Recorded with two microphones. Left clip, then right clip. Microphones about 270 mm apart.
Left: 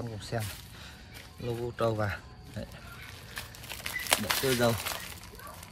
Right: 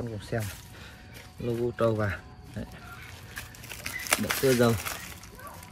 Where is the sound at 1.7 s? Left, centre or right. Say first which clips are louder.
Right 1 dB; centre.